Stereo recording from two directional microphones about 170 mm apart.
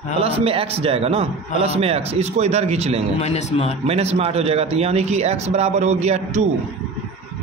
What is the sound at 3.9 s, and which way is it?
A man's voice, 40° right (ahead or behind).